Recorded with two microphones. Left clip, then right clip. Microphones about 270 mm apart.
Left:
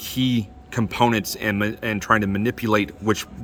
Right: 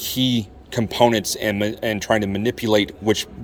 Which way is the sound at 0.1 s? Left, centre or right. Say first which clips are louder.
Right 2 dB; centre.